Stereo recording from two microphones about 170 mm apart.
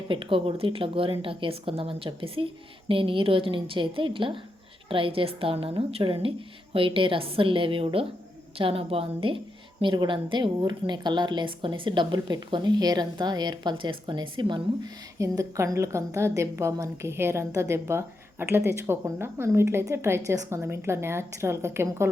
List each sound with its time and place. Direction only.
0.1 s a woman's voice: 30° right (ahead or behind); by 22.1 s 15° right (ahead or behind)